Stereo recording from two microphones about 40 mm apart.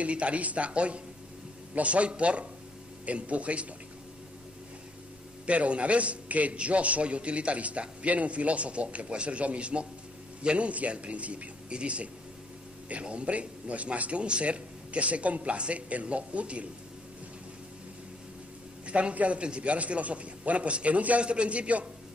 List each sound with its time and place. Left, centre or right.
0.0 s a man's voice: right
5.5 s a man's voice: right
10.7 s a man's voice: right
18.9 s a man's voice: right